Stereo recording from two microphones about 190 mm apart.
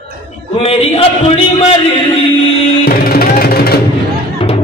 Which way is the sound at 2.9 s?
50° left (ahead or behind).